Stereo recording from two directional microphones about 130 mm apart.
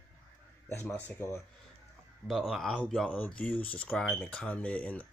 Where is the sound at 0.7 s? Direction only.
20° left (ahead or behind).